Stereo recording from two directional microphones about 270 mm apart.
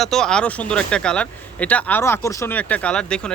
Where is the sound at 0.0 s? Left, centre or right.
Centre.